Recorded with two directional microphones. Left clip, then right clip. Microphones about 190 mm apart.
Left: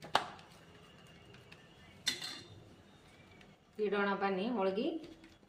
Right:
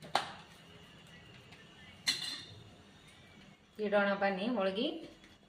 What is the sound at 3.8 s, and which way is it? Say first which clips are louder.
Speech: right 4 dB; 40° left (ahead or behind).